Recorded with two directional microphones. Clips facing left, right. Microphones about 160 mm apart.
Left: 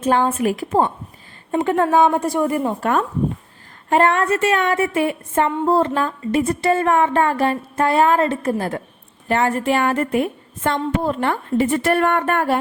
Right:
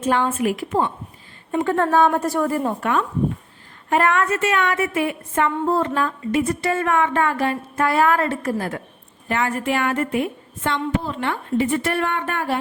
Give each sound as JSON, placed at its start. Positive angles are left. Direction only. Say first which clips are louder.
{"t": 0.3, "sound": "a woman's voice", "louder": "left 2 dB", "side_deg": 35}
{"t": 1.6, "sound": "a woman's voice", "louder": "left 2 dB", "side_deg": 15}
{"t": 2.8, "sound": "a woman's voice", "louder": "left 2 dB", "side_deg": 40}
{"t": 3.8, "sound": "a woman's voice", "louder": "left 3 dB", "side_deg": 30}